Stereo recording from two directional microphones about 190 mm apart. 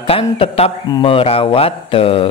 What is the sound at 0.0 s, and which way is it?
Speech, 30° left (ahead or behind).